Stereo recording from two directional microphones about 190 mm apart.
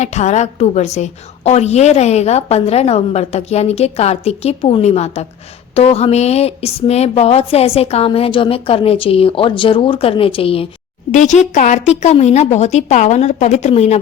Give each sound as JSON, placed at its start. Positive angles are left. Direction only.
{"t": 0.0, "sound": "a woman's voice", "side_deg": 35}
{"t": 11.1, "sound": "a woman's voice", "side_deg": 40}